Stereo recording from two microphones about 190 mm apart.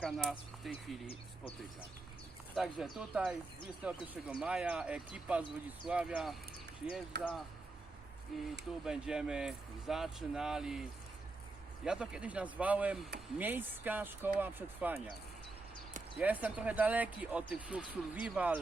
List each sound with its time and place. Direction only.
0.0 s speech: centre (ahead or behind)
2.6 s speech: centre (ahead or behind)
7.1 s speech: 65° right (ahead or behind)
8.3 s speech: centre (ahead or behind)
11.9 s speech: 5° right (ahead or behind)
16.1 s speech: 10° right (ahead or behind)